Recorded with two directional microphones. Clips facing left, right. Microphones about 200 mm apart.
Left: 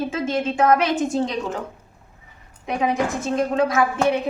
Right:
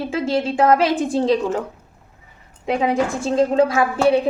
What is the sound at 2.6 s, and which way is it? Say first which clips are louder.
A woman's voice: right 3 dB; 30° right (ahead or behind).